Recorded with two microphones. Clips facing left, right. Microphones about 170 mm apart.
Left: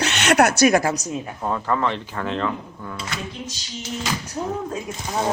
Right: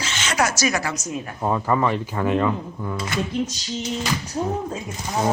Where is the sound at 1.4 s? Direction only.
10° right (ahead or behind).